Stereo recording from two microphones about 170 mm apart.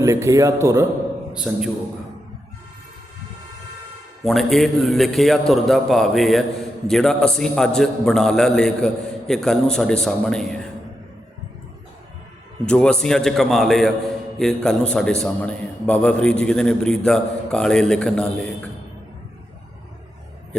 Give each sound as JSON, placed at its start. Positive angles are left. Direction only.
{"t": 0.0, "sound": "speech", "side_deg": -20}
{"t": 1.3, "sound": "a man's voice", "side_deg": -5}
{"t": 4.2, "sound": "a man's voice", "side_deg": 0}
{"t": 12.6, "sound": "a man's voice", "side_deg": 5}